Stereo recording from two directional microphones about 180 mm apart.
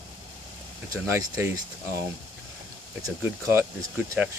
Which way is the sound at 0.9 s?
15° right (ahead or behind).